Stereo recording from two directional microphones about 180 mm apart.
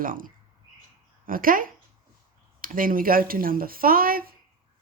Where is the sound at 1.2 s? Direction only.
50° right (ahead or behind).